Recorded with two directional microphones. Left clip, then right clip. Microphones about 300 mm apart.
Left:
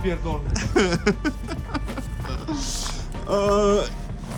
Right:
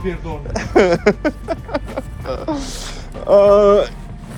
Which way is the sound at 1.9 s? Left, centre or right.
Centre.